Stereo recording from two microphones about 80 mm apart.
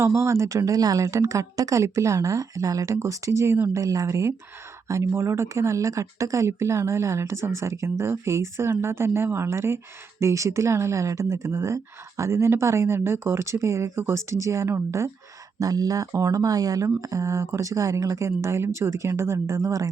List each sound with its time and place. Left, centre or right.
0.0 s speech: right
3.8 s speech: right
15.6 s speech: right